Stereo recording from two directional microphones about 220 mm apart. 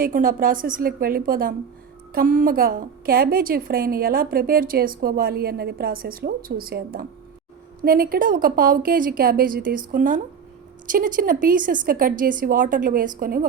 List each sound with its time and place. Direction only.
0.0 s a woman's voice: 40° right (ahead or behind)